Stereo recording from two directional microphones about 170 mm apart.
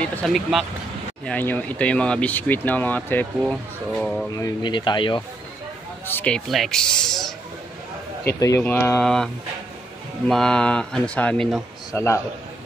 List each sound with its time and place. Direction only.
0.0 s speech: 5° left (ahead or behind)
1.2 s speech: 10° left (ahead or behind)
4.4 s speech: 25° left (ahead or behind)
6.0 s speech: 10° left (ahead or behind)
8.2 s speech: 15° left (ahead or behind)
9.0 s speech: 5° left (ahead or behind)
11.9 s speech: 20° left (ahead or behind)